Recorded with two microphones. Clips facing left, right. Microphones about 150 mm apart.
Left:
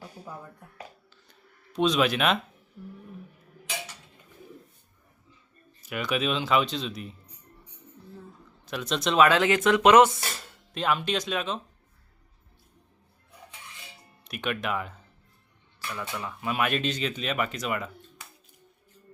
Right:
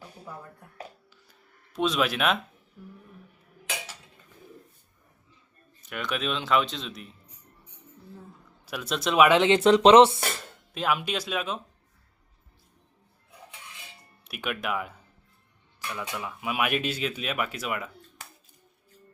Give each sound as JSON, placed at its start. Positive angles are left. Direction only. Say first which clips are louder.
{"t": 1.3, "sound": "a sound", "louder": "left 5 dB", "side_deg": -5}
{"t": 5.8, "sound": "speech", "louder": "left 3 dB", "side_deg": 5}
{"t": 8.6, "sound": "speech", "louder": "left 1 dB", "side_deg": -5}
{"t": 10.8, "sound": "speech", "louder": "left 1 dB", "side_deg": -5}
{"t": 14.3, "sound": "speech", "louder": "left 1 dB", "side_deg": -5}